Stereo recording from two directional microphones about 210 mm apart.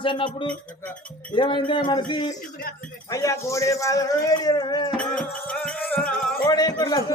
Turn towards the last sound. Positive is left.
turn(degrees=20)  # may be behind; listen again after turning